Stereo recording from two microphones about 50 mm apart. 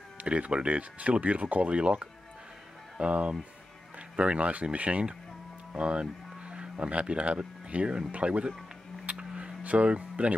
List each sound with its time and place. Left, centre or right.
0.2 s speech: right
9.1 s a sound: centre
9.6 s speech: right